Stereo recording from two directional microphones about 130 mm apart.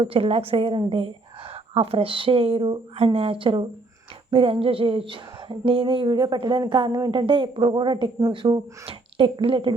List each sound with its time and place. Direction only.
0.0 s speech: 45° right (ahead or behind)